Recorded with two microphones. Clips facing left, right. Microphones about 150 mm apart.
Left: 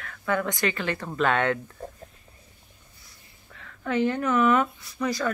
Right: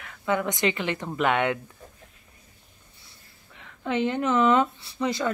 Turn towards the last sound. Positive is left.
turn(degrees=-20)  # may be behind; listen again after turning